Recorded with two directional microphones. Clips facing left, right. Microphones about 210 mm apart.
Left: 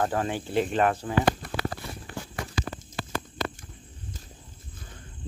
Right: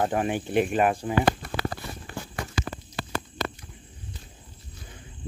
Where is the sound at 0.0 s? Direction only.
15° right (ahead or behind).